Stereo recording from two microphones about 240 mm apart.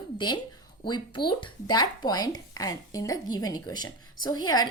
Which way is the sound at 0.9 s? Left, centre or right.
Centre.